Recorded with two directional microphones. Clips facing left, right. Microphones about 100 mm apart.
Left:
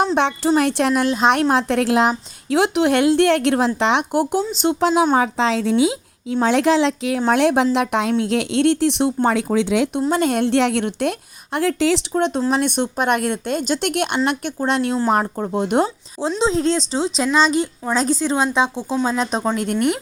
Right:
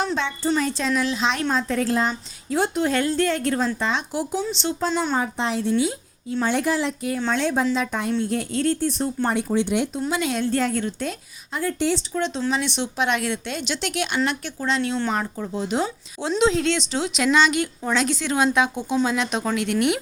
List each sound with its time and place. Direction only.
0.2 s a woman's voice: 80° left
4.7 s a woman's voice: 80° left
5.8 s a sound: 90° left
6.4 s a woman's voice: 90° left
7.3 s a woman's voice: 70° left (ahead or behind); by 10.0 s 85° left
10.1 s a woman's voice: 50° left (ahead or behind); by 11.1 s 70° left (ahead or behind)
11.5 s a woman's voice: 85° left
12.1 s speech: 55° left (ahead or behind)
16.4 s speech: 30° left (ahead or behind)